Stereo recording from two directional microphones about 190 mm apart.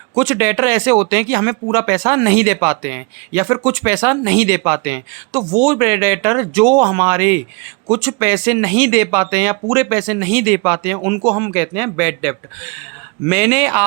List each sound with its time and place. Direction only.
0.1 s speech: 15° right (ahead or behind)